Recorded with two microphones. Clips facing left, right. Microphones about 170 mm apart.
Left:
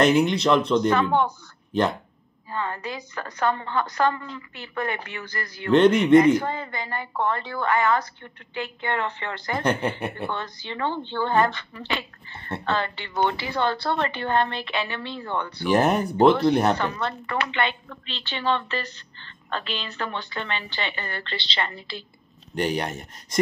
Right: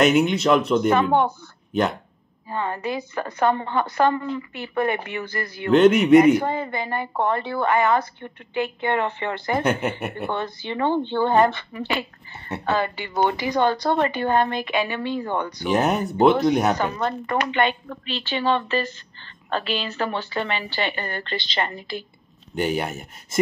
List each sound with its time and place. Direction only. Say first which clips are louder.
0.0 s speech: right 1 dB; 5° right (ahead or behind)
2.5 s a woman's voice: right 4 dB; 15° right (ahead or behind)
5.7 s speech: right 2 dB; 5° right (ahead or behind)
6.4 s a woman's voice: right 5 dB; 20° right (ahead or behind)
9.6 s speech: left 1 dB; 5° right (ahead or behind)
10.2 s a woman's voice: right 4 dB; 20° right (ahead or behind)
15.7 s speech: left 1 dB; centre (ahead or behind)
17.3 s a woman's voice: right 4 dB; 45° right (ahead or behind)
18.0 s a woman's voice: right 4 dB; 10° right (ahead or behind)
20.8 s a woman's voice: right 4 dB; 45° right (ahead or behind)
22.5 s speech: right 1 dB; 5° right (ahead or behind)